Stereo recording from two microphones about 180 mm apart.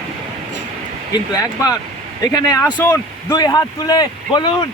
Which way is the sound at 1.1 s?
20° left (ahead or behind).